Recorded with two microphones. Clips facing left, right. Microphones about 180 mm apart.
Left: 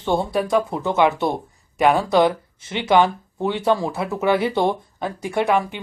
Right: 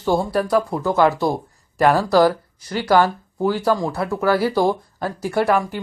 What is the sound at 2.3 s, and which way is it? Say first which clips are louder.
Speech: right 2 dB; 25° left (ahead or behind).